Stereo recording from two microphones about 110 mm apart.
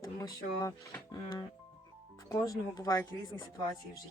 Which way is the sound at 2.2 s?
30° left (ahead or behind).